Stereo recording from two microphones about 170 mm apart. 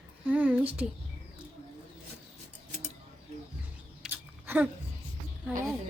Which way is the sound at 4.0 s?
10° right (ahead or behind).